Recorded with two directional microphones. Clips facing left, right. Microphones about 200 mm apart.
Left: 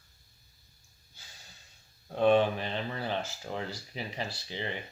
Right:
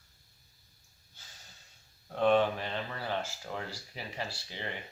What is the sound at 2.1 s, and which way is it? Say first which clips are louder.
Speech: left 2 dB; 15° left (ahead or behind).